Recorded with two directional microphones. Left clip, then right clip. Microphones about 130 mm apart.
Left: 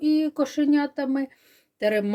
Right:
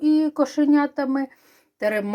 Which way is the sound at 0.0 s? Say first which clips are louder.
Right 3 dB; 25° left (ahead or behind).